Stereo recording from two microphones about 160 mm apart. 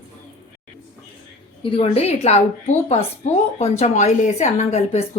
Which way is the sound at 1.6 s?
35° left (ahead or behind).